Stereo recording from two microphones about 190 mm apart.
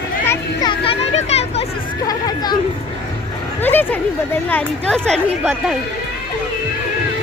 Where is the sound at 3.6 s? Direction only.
10° left (ahead or behind).